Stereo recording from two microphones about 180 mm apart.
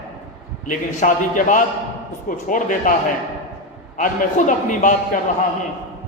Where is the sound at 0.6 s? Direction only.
45° left (ahead or behind).